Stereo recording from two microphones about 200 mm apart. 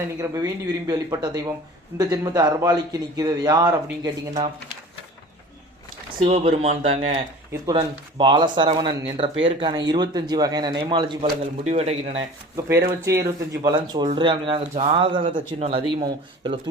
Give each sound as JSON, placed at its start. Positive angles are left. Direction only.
{"t": 0.2, "sound": "speech", "side_deg": -15}
{"t": 6.1, "sound": "speech", "side_deg": -30}
{"t": 12.5, "sound": "speech", "side_deg": -15}